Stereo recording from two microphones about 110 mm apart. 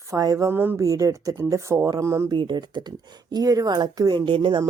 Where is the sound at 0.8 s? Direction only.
30° right (ahead or behind).